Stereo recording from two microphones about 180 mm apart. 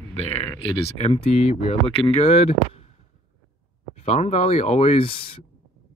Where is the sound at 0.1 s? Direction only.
35° left (ahead or behind).